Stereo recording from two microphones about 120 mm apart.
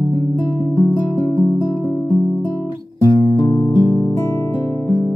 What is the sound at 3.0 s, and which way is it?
Music, 40° left (ahead or behind).